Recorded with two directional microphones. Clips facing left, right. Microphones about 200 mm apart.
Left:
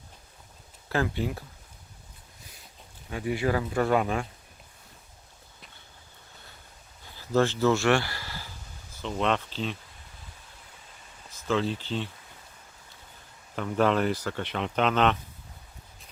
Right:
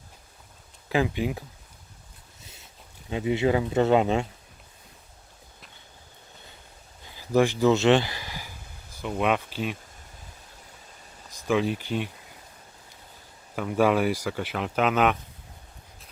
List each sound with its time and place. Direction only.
0.9 s speech: 15° right (ahead or behind)
2.4 s boat: 25° right (ahead or behind)
3.1 s speech: 20° right (ahead or behind)
7.2 s a sound: 15° right (ahead or behind)
11.3 s speech: 15° right (ahead or behind)
13.6 s speech: 10° right (ahead or behind)